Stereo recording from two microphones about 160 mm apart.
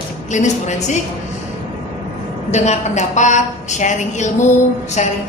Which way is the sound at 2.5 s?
45° left (ahead or behind).